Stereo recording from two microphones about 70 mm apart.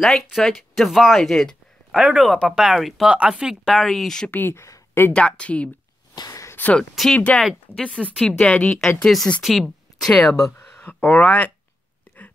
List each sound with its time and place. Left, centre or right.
0.0 s speech: centre
2.0 s speech: centre
2.2 s speech: centre
3.1 s speech: centre
3.7 s speech: centre
4.3 s speech: left
5.1 s speech: centre
7.0 s speech: centre
7.7 s speech: centre
10.8 s speech: left